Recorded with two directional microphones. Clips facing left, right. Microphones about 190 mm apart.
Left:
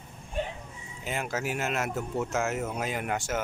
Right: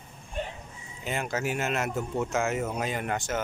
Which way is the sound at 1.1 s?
5° left (ahead or behind).